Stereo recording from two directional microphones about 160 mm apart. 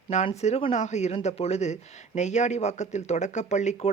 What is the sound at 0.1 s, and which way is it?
Speech, 45° left (ahead or behind).